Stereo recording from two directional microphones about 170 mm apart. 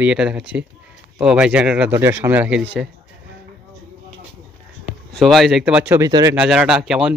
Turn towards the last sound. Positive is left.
turn(degrees=-5)  # may be behind; listen again after turning